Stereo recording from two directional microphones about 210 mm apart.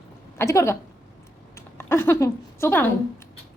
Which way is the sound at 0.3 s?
15° left (ahead or behind).